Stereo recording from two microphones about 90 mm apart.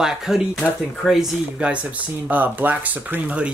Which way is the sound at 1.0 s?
5° right (ahead or behind).